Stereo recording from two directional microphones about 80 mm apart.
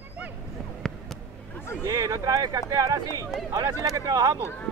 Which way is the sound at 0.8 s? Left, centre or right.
Centre.